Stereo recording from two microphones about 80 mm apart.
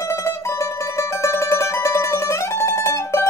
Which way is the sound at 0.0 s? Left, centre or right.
Left.